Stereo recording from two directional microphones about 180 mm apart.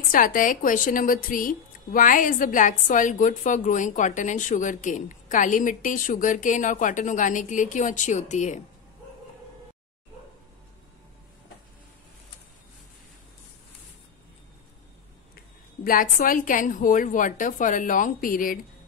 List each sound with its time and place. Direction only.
0.1 s a woman's voice: 50° left (ahead or behind)
15.3 s a woman's voice: 50° left (ahead or behind)